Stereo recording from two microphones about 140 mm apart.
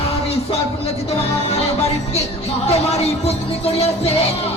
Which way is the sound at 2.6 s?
50° left (ahead or behind).